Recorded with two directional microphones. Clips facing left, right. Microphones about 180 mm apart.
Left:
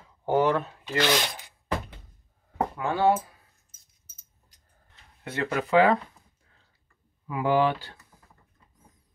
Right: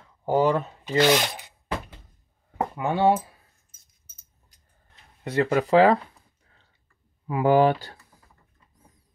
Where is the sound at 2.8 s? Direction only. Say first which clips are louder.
Right 2 dB; 20° right (ahead or behind).